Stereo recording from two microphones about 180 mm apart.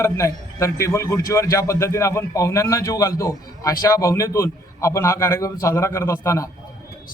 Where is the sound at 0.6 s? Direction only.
15° left (ahead or behind).